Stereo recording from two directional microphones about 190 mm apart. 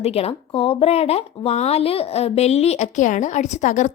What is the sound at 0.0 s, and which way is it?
Speech, 30° left (ahead or behind).